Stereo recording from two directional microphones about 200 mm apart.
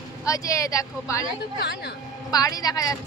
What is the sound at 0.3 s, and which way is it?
A woman's voice, 15° left (ahead or behind).